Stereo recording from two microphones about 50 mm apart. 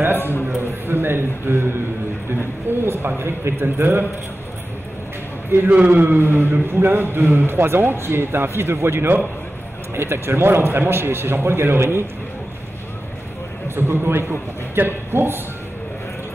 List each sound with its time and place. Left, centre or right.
0.2 s a man's voice: left
0.8 s speech: right
2.8 s speech: right
5.7 s a man's voice: right
13.7 s speech: right